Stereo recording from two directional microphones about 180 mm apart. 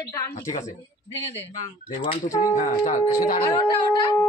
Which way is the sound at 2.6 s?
40° left (ahead or behind).